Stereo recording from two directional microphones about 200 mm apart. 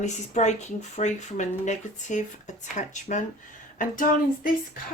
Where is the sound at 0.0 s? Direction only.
35° left (ahead or behind).